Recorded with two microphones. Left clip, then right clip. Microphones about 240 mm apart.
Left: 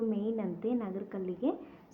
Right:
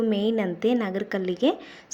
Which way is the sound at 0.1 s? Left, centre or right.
Right.